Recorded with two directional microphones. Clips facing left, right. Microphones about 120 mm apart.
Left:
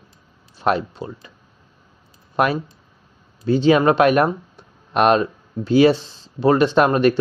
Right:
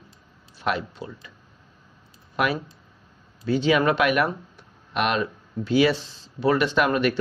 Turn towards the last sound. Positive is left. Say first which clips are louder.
# left 6 dB
turn(degrees=35)  # may be behind; listen again after turning